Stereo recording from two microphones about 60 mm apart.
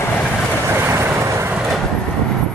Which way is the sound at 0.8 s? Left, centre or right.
Right.